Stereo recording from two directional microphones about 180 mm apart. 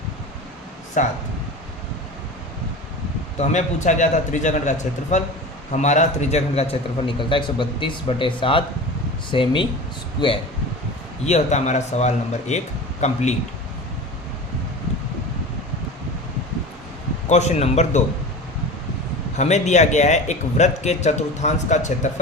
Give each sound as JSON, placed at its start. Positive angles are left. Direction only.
{"t": 1.0, "sound": "speech", "side_deg": 40}
{"t": 3.4, "sound": "a man's voice", "side_deg": 40}
{"t": 17.2, "sound": "speech", "side_deg": 40}
{"t": 19.4, "sound": "speech", "side_deg": 40}